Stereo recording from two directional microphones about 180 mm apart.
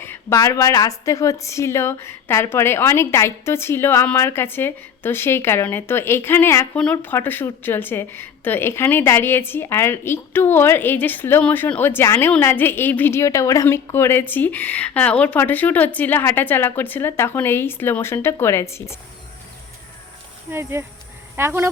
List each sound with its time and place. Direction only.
0.0 s a woman's voice: 15° left (ahead or behind)
20.5 s speech: 15° right (ahead or behind)